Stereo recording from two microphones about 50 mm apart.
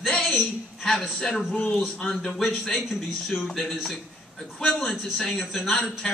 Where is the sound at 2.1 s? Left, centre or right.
Centre.